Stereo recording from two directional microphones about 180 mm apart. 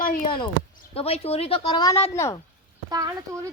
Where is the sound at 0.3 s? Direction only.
25° left (ahead or behind).